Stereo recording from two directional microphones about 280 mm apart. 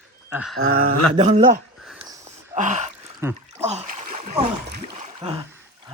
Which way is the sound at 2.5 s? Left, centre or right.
Right.